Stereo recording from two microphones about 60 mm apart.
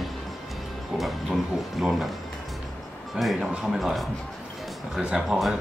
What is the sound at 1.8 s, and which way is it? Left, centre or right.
Speech, centre.